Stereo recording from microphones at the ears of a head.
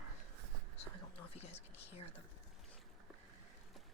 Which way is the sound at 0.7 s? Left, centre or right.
Left.